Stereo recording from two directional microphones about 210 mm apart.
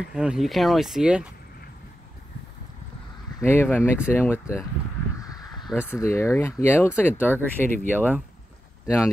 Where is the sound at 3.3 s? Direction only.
10° left (ahead or behind).